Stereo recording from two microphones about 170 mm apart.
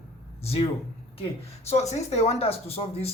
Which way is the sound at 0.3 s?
35° left (ahead or behind).